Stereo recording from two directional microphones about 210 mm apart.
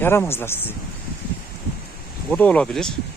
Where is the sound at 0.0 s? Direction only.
10° left (ahead or behind).